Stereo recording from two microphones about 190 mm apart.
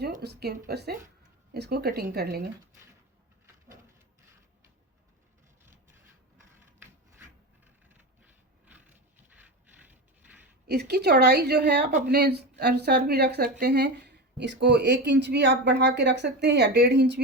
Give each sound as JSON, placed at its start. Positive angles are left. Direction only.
{"t": 0.2, "sound": "speech", "side_deg": -60}
{"t": 5.6, "sound": "rub", "side_deg": -15}
{"t": 8.2, "sound": "a sound", "side_deg": -10}
{"t": 10.7, "sound": "speech", "side_deg": -60}